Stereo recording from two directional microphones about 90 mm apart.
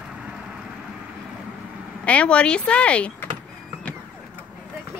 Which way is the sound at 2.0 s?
15° left (ahead or behind).